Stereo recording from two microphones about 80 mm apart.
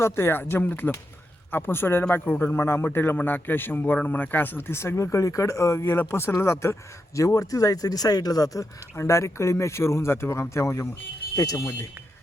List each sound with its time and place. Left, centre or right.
0.0 s a man's voice: left
7.2 s speech: left
9.0 s speech: left
11.3 s speech: left